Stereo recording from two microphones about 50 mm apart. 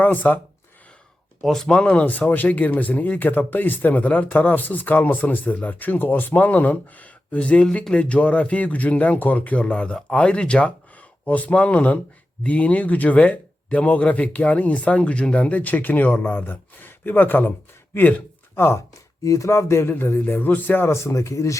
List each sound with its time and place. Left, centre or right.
0.0 s speech: left
1.4 s speech: centre
1.7 s speech: left
18.5 s speech: left
19.2 s speech: left
19.9 s a man's voice: left
20.8 s speech: left